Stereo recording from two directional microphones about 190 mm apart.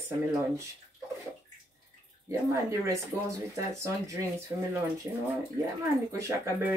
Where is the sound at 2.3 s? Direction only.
15° right (ahead or behind).